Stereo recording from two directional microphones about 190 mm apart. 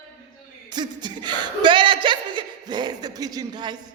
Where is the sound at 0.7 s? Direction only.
25° right (ahead or behind).